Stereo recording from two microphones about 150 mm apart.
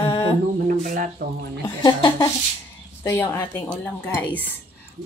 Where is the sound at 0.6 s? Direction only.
60° right (ahead or behind).